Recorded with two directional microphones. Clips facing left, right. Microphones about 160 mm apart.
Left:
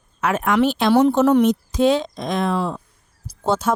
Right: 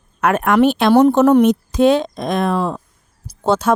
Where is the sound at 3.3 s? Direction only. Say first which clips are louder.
Right 4 dB; 80° right.